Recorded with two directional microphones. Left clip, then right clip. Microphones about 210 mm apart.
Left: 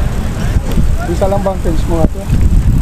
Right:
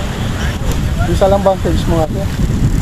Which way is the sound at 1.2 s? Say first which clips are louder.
Right 4 dB; 40° right (ahead or behind).